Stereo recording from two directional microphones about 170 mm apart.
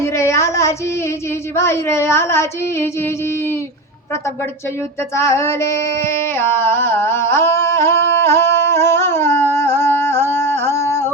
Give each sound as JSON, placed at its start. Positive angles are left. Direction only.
{"t": 0.0, "sound": "child singing", "side_deg": 15}
{"t": 1.5, "sound": "speech", "side_deg": 15}
{"t": 5.1, "sound": "female singing", "side_deg": 15}